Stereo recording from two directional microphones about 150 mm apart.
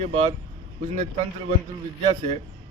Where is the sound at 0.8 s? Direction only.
55° right (ahead or behind).